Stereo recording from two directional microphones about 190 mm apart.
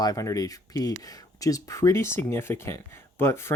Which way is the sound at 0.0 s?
20° left (ahead or behind).